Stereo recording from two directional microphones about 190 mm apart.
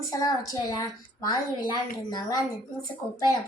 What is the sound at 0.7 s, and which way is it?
Speech, 20° left (ahead or behind).